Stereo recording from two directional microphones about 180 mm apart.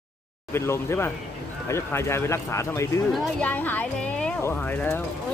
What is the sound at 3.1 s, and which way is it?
A woman's voice, 5° left (ahead or behind).